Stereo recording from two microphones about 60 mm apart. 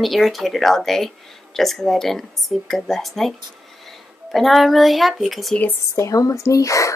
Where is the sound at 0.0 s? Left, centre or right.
Centre.